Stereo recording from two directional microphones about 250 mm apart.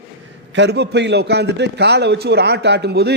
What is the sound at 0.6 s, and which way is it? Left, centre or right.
A man's voice, right.